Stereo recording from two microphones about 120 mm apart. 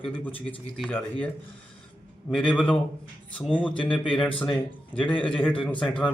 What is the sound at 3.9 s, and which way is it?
Speech, 5° left (ahead or behind).